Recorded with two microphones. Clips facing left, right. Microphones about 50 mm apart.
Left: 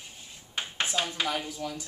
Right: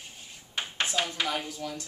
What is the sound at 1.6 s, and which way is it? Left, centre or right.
Speech, centre.